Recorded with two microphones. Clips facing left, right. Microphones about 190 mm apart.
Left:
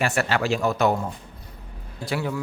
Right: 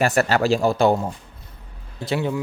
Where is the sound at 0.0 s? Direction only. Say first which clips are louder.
Right 5 dB; 40° right (ahead or behind).